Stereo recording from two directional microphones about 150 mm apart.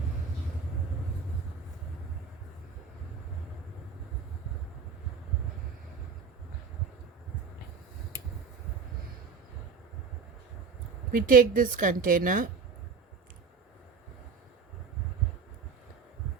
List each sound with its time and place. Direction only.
11.1 s a woman's voice: 70° right (ahead or behind)